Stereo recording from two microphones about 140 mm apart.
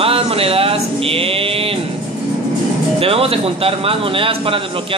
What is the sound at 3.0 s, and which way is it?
A man's voice, 45° right (ahead or behind).